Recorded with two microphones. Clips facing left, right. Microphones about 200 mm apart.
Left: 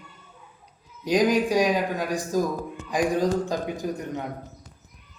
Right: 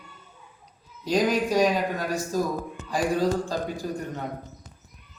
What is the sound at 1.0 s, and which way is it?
A man's voice, 15° left (ahead or behind).